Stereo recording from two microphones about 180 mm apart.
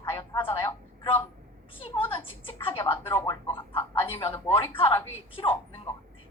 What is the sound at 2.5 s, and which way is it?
Music, 30° left (ahead or behind).